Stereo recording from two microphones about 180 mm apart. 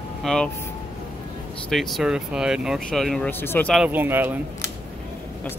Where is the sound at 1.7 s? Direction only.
Centre (ahead or behind).